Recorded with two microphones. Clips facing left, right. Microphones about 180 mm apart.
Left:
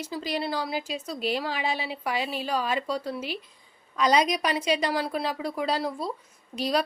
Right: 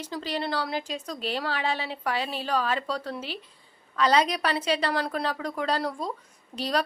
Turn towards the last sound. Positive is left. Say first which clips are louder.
# left 1 dB
turn(degrees=10)  # may be behind; listen again after turning